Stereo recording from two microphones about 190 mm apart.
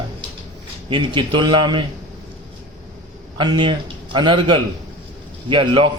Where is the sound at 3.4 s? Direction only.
25° right (ahead or behind).